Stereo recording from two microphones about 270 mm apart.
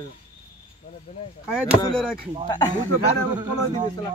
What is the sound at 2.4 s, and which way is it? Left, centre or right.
Speech, centre.